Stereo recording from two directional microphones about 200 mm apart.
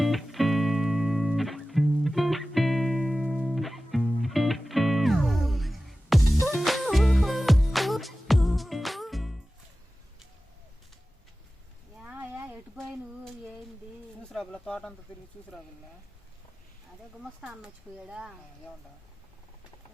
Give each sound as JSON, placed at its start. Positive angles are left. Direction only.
{"t": 0.0, "sound": "music", "side_deg": 0}
{"t": 12.0, "sound": "a sound", "side_deg": -10}
{"t": 14.3, "sound": "bird", "side_deg": 5}
{"t": 17.4, "sound": "speech", "side_deg": -5}